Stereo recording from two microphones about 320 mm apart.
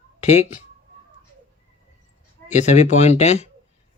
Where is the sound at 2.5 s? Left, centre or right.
Left.